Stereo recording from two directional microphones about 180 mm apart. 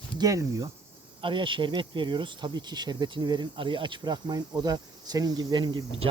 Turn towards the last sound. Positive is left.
turn(degrees=-25)  # may be behind; listen again after turning